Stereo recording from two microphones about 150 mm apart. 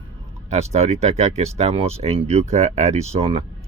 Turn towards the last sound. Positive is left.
turn(degrees=-40)  # may be behind; listen again after turning